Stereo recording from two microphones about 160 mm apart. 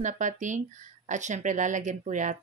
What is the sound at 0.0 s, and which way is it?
Speech, 50° right (ahead or behind).